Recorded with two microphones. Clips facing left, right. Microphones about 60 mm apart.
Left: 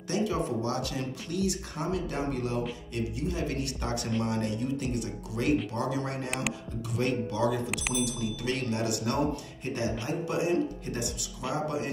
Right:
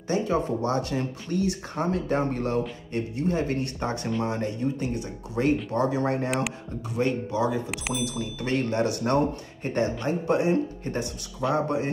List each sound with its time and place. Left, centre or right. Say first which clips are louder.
0.1 s speech: right 4 dB; right
7.0 s speech: right 3 dB; right
8.0 s speech: right 1 dB; right